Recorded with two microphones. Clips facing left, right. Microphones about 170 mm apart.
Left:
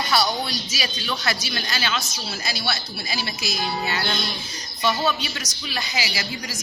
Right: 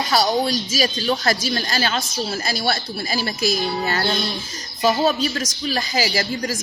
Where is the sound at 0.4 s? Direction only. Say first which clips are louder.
Right 8 dB; 45° right (ahead or behind).